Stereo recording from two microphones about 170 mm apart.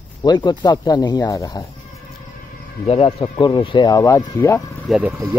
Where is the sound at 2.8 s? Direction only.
35° left (ahead or behind); by 4.6 s 15° left (ahead or behind).